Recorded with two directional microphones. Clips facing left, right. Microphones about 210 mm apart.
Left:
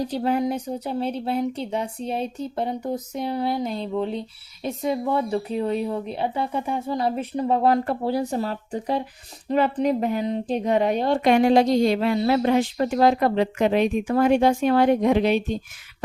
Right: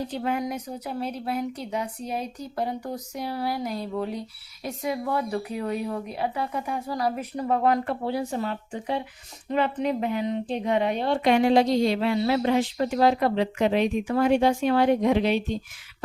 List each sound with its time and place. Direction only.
0.0 s a woman's voice: 35° left (ahead or behind)